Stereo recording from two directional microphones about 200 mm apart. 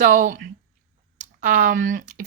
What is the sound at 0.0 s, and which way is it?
Speech, 40° right (ahead or behind).